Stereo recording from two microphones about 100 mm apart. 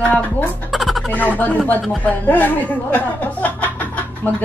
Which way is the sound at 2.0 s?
15° left (ahead or behind).